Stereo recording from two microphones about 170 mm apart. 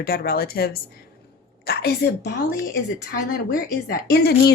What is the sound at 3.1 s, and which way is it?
A woman's voice, 60° left (ahead or behind).